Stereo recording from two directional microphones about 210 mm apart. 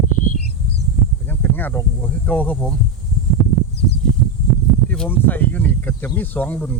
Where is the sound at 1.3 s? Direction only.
10° left (ahead or behind).